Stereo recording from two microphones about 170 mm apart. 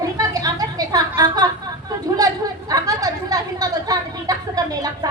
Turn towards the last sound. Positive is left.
turn(degrees=-20)  # may be behind; listen again after turning